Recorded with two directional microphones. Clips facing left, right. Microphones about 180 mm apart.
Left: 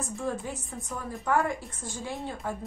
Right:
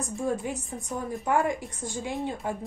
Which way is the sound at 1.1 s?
20° right (ahead or behind).